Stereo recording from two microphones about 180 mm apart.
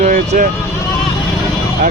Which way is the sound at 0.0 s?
50° right (ahead or behind).